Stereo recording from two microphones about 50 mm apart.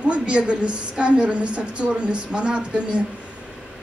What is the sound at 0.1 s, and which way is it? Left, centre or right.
A woman's voice, right.